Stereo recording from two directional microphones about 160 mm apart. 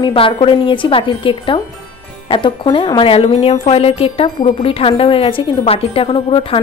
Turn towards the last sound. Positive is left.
turn(degrees=35)  # may be behind; listen again after turning